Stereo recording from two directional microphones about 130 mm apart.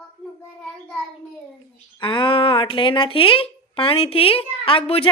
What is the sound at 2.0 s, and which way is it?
A woman's voice, 40° left (ahead or behind).